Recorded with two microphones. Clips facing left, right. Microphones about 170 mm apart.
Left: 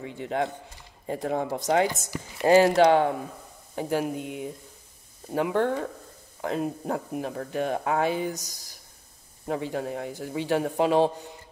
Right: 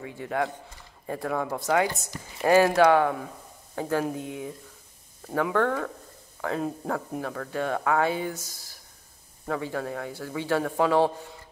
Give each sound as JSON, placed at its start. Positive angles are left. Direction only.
{"t": 0.0, "sound": "speech", "side_deg": 25}